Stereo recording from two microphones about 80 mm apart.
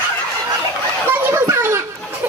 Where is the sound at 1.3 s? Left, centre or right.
Right.